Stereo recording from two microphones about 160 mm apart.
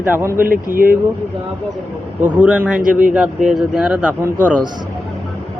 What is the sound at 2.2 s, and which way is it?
Speech, 10° right (ahead or behind).